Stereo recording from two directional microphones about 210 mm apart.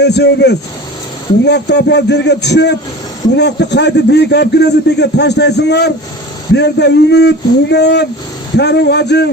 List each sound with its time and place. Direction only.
0.0 s speech: 55° left (ahead or behind)